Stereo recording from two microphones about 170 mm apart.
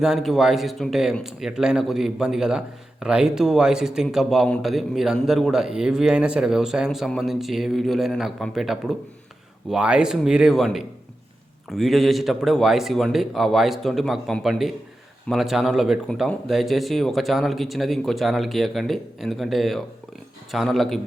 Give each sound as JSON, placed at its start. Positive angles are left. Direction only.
{"t": 0.0, "sound": "speech", "side_deg": 0}